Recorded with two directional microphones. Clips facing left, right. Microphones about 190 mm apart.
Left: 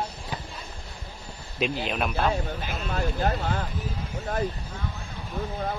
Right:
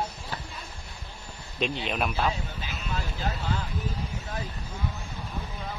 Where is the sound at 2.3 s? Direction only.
55° left (ahead or behind).